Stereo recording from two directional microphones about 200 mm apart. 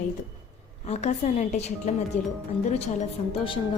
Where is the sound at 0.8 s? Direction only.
35° left (ahead or behind).